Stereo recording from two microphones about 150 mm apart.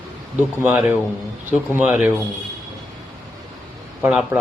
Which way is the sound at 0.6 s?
5° right (ahead or behind).